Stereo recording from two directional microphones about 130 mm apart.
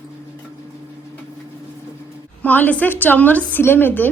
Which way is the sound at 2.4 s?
15° left (ahead or behind).